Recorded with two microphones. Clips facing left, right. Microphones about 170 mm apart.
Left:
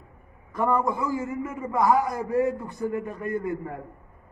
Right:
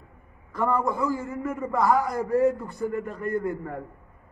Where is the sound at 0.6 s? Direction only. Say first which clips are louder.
Even; 20° left (ahead or behind).